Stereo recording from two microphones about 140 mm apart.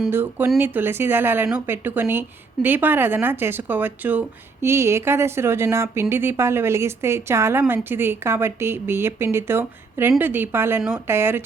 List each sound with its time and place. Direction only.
0.1 s a woman's voice: 15° right (ahead or behind)
10.8 s speech: 5° right (ahead or behind)
11.1 s a woman's voice: 15° right (ahead or behind)